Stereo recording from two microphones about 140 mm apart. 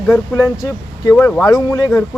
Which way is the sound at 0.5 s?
20° left (ahead or behind).